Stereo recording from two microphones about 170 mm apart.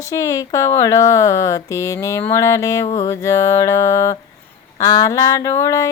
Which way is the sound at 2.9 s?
20° left (ahead or behind).